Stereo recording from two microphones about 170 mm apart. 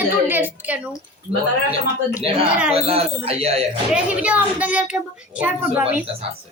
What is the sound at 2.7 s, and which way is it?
Speech, 35° right (ahead or behind).